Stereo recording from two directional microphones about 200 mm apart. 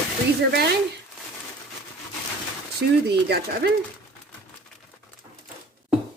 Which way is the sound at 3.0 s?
55° right (ahead or behind).